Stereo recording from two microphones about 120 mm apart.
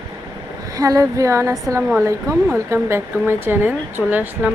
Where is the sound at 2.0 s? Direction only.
20° right (ahead or behind).